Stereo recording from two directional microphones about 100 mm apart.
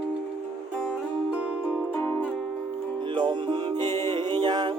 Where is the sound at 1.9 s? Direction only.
15° left (ahead or behind).